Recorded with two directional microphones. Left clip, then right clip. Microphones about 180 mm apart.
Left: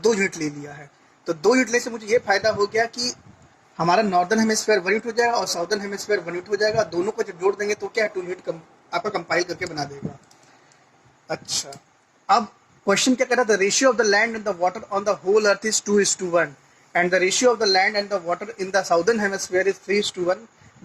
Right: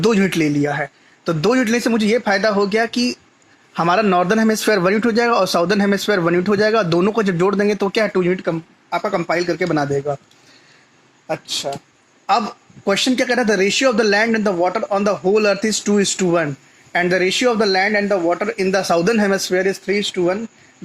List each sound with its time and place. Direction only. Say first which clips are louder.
0.0 s a man's voice: right 4 dB; 40° right (ahead or behind)
11.3 s speech: right 6 dB; 50° right (ahead or behind)
12.8 s a man's voice: right 3 dB; 40° right (ahead or behind)